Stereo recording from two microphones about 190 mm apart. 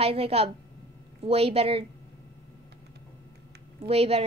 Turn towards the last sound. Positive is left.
turn(degrees=-30)  # may be behind; listen again after turning